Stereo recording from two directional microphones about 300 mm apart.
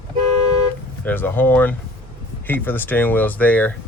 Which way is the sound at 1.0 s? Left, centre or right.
Centre.